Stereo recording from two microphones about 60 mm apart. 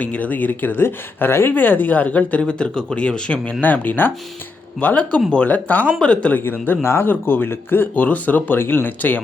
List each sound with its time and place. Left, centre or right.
0.0 s speech: left
3.6 s speech: left
6.3 s speech: left